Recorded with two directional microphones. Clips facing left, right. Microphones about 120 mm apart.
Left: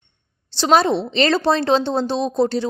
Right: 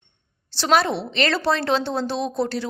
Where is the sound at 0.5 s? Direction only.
20° left (ahead or behind).